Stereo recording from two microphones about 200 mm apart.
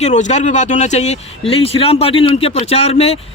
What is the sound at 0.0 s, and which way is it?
Speech, 35° left (ahead or behind).